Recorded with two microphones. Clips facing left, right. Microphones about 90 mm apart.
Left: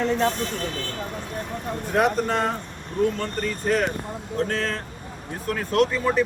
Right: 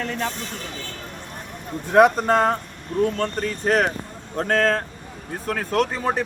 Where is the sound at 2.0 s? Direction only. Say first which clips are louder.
Right 6 dB; 45° right (ahead or behind).